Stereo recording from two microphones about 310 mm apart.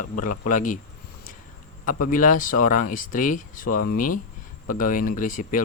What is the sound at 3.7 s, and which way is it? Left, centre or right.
Speech, left.